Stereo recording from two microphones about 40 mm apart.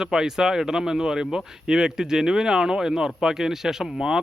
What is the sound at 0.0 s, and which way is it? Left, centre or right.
Speech, centre.